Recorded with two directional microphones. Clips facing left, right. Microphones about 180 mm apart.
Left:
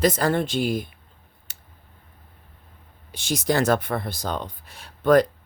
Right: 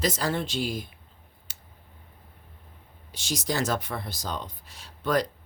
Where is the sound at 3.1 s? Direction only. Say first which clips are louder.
Left 6 dB; 55° left (ahead or behind).